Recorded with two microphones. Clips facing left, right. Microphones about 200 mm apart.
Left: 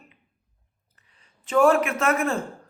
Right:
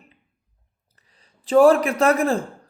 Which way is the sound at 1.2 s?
35° right (ahead or behind).